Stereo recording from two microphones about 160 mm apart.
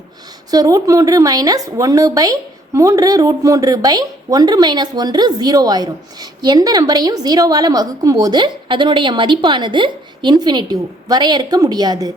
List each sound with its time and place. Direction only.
0.5 s a woman's voice: 20° right (ahead or behind)